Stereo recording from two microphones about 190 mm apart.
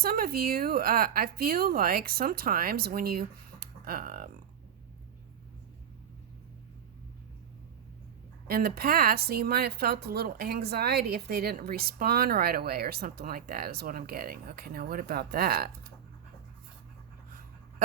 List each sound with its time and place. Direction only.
0.0 s speech: 50° right (ahead or behind)
8.4 s speech: 55° right (ahead or behind)